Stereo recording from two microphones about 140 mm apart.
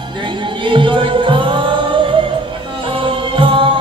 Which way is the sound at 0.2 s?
35° right (ahead or behind).